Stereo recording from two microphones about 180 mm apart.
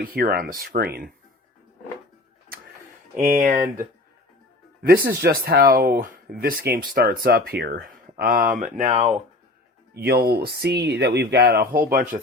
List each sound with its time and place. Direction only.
0.0 s speech: 55° right (ahead or behind)
3.2 s speech: 50° right (ahead or behind)
4.8 s speech: 55° right (ahead or behind); by 9.1 s 40° right (ahead or behind)
9.9 s speech: 60° right (ahead or behind)